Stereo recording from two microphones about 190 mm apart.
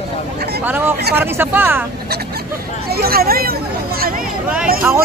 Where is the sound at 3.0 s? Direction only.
50° right (ahead or behind).